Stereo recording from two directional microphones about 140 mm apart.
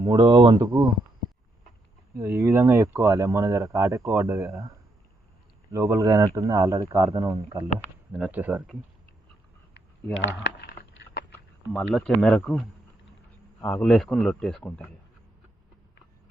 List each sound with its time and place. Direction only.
0.0 s speech: 30° right (ahead or behind)
2.1 s speech: 20° right (ahead or behind)
8.2 s speech: 10° right (ahead or behind)
11.3 s speech: 5° left (ahead or behind)
13.7 s a man's voice: 10° left (ahead or behind)